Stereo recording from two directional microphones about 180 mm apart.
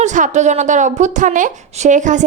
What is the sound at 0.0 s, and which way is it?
A woman's voice, 40° right (ahead or behind).